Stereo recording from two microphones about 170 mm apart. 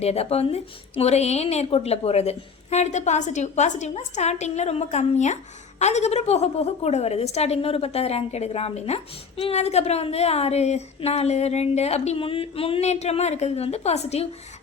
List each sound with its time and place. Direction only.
0.0 s a woman's voice: 35° left (ahead or behind)